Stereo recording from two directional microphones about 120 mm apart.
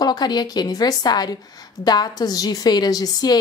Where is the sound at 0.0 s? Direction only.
35° left (ahead or behind).